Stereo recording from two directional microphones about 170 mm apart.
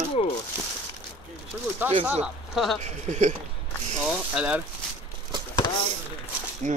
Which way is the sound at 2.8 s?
45° right (ahead or behind).